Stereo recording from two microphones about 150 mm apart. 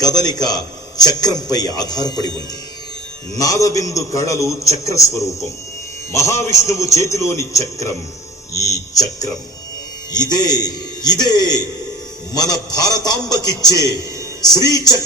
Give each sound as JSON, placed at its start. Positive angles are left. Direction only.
{"t": 0.0, "sound": "a man's voice", "side_deg": 25}
{"t": 3.3, "sound": "a man's voice", "side_deg": 25}
{"t": 10.1, "sound": "a man's voice", "side_deg": 25}